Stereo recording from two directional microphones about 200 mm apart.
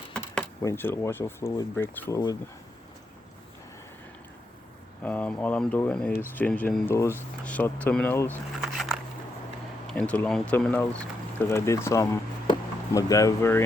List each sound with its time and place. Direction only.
0.6 s speech: 10° left (ahead or behind)
5.0 s speech: 5° left (ahead or behind)
8.6 s a sound: centre (ahead or behind)
9.8 s speech: 5° left (ahead or behind)